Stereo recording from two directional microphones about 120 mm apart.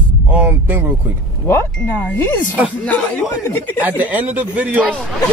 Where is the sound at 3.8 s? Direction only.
15° right (ahead or behind).